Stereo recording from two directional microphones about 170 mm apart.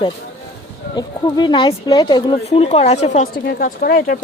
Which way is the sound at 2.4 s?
35° left (ahead or behind).